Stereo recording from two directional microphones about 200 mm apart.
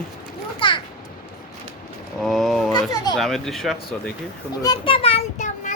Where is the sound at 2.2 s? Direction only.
Centre (ahead or behind).